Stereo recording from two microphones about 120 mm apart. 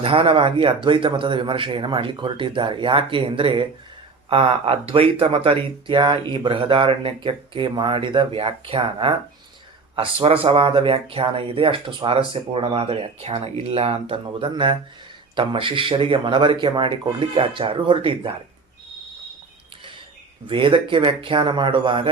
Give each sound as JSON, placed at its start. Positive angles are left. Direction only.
{"t": 0.0, "sound": "speech", "side_deg": -50}
{"t": 20.5, "sound": "speech", "side_deg": -45}